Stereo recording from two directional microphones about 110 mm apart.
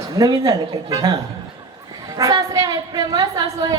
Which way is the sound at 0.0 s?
30° right (ahead or behind).